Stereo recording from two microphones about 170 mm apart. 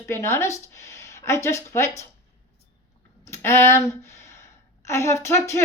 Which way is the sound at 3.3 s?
15° left (ahead or behind).